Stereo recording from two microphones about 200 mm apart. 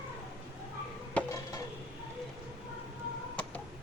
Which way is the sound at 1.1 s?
15° left (ahead or behind).